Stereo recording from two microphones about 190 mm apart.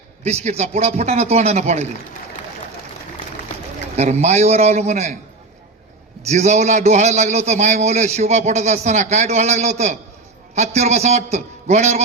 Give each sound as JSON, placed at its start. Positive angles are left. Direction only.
{"t": 0.3, "sound": "a man's voice", "side_deg": -35}
{"t": 3.9, "sound": "a man's voice", "side_deg": -35}
{"t": 6.2, "sound": "a man's voice", "side_deg": -40}